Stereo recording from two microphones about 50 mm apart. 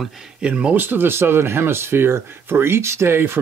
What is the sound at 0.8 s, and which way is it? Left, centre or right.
Speech, right.